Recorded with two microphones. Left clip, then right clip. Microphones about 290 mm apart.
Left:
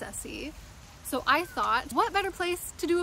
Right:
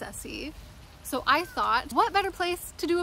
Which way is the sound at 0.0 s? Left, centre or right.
Centre.